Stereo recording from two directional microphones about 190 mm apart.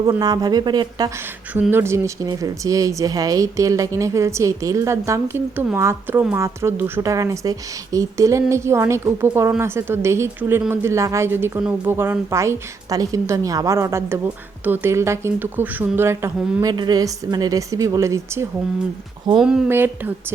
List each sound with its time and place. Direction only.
0.0 s a woman's voice: 20° right (ahead or behind)
1.5 s a woman's voice: 10° right (ahead or behind)
19.4 s speech: 5° right (ahead or behind)